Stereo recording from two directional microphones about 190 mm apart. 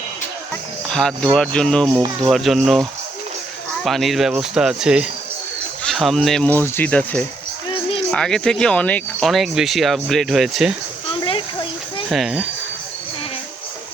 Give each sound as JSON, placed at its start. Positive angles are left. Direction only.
{"t": 0.5, "sound": "speech", "side_deg": 5}
{"t": 3.8, "sound": "speech", "side_deg": 0}
{"t": 11.1, "sound": "a sound", "side_deg": 30}
{"t": 12.0, "sound": "speech", "side_deg": 0}